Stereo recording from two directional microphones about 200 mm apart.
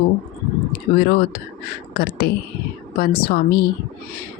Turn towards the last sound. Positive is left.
turn(degrees=50)  # may be behind; listen again after turning